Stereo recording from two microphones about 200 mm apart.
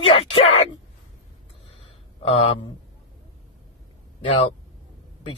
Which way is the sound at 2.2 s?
25° left (ahead or behind).